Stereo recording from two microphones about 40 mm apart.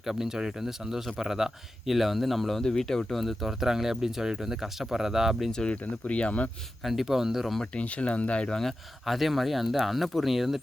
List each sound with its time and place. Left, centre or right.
0.0 s a man's voice: centre
5.8 s speech: left
6.8 s a man's voice: centre
7.6 s speech: left
9.0 s speech: centre